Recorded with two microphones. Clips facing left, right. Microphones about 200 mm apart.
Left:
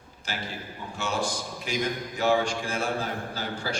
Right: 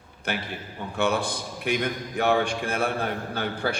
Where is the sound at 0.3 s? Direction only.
60° right (ahead or behind).